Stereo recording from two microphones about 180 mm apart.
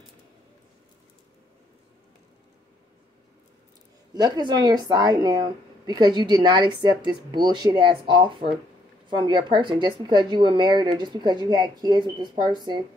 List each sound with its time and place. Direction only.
4.1 s speech: 25° right (ahead or behind)